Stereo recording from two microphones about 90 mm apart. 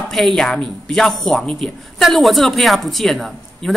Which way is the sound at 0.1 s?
Centre (ahead or behind).